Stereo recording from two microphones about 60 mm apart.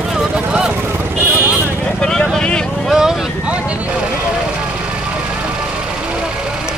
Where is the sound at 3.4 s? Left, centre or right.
Centre.